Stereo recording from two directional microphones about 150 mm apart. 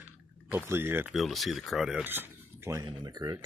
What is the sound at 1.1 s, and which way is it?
Speech, centre (ahead or behind).